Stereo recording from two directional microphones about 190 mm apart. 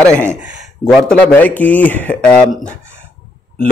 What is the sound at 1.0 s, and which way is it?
A man's voice, 10° left (ahead or behind).